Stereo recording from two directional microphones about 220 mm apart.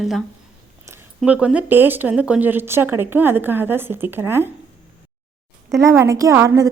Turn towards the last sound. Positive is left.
turn(degrees=-15)  # may be behind; listen again after turning